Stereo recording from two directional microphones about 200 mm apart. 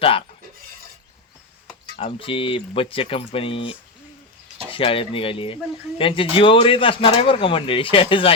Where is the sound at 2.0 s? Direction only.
30° left (ahead or behind).